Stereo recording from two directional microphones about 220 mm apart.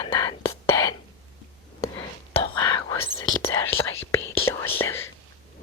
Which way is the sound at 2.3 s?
20° left (ahead or behind).